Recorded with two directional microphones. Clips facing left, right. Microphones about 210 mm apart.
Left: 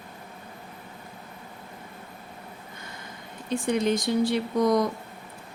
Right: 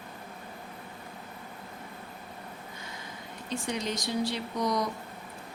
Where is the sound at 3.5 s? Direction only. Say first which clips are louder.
Left 8 dB; 55° left (ahead or behind).